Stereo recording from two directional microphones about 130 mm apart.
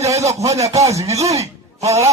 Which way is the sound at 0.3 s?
25° right (ahead or behind).